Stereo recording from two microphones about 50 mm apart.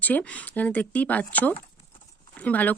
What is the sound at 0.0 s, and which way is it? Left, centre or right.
Speech, left.